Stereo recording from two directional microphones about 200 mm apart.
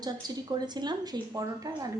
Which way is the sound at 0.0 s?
20° right (ahead or behind).